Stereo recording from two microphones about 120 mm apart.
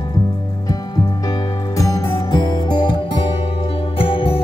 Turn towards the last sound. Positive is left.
turn(degrees=50)  # may be behind; listen again after turning